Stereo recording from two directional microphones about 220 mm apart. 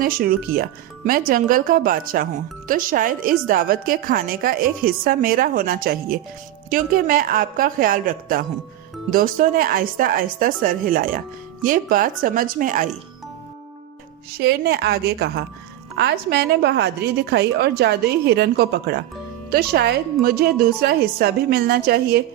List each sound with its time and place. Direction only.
0.0 s a woman's voice: 40° right (ahead or behind)
14.3 s a woman's voice: 45° right (ahead or behind)